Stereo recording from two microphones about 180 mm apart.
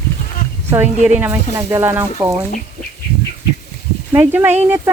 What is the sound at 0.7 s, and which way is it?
Speech, 10° right (ahead or behind).